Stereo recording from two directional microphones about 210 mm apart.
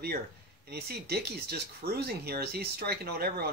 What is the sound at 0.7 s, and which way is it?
Speech, 50° right (ahead or behind).